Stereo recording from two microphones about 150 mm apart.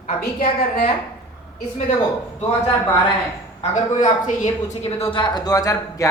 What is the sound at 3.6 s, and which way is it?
Speech, 55° left (ahead or behind).